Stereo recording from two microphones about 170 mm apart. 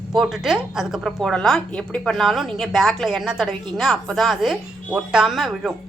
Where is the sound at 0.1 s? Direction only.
Centre (ahead or behind).